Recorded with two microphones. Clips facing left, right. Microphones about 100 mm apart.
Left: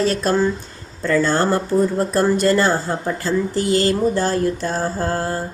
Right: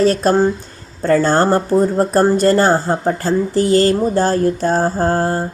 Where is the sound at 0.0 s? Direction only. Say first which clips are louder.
Right 5 dB; 45° right (ahead or behind).